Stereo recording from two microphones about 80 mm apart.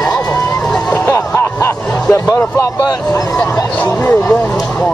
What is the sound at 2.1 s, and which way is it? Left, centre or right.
Speech, left.